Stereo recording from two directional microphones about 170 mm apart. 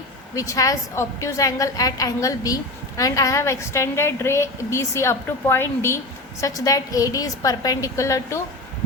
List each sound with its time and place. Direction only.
0.3 s a woman's voice: 20° left (ahead or behind)